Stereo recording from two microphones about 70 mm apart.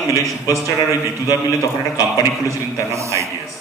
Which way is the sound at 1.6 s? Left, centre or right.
Left.